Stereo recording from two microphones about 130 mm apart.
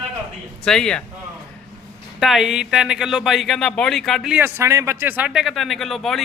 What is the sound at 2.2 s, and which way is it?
Speech, 5° right (ahead or behind).